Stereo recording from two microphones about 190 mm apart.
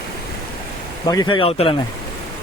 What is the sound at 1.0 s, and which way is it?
Speech, 20° left (ahead or behind).